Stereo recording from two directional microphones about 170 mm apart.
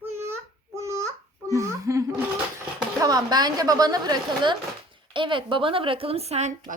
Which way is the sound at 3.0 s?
25° right (ahead or behind).